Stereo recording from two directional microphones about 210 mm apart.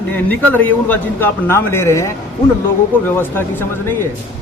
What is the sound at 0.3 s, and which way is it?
A man's voice, 10° left (ahead or behind).